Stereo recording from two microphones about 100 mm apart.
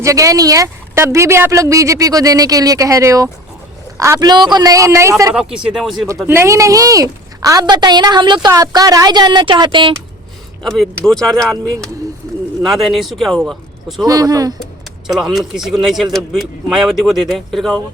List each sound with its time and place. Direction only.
0.0 s a woman's voice: 35° right (ahead or behind)
5.3 s speech: 10° right (ahead or behind)
6.2 s a woman's voice: 25° right (ahead or behind); by 9.9 s 50° right (ahead or behind)
10.6 s speech: centre (ahead or behind)
14.0 s a woman's voice: 40° right (ahead or behind)
15.0 s speech: 5° right (ahead or behind)